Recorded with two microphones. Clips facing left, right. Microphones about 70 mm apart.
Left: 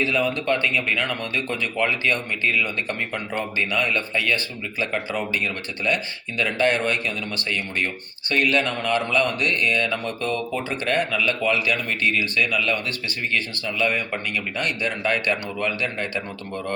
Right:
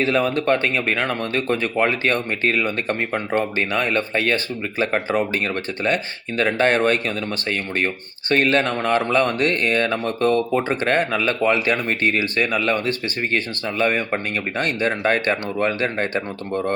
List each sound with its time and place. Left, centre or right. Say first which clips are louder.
0.0 s speech: right 4 dB; right
8.3 s speech: right 3 dB; right